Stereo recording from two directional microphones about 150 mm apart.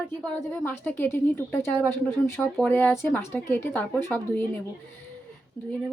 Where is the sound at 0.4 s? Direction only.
15° left (ahead or behind).